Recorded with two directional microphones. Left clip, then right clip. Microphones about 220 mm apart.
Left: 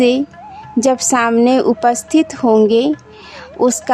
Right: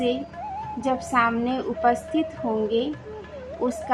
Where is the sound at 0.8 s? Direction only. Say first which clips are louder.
Left 9 dB; 55° left (ahead or behind).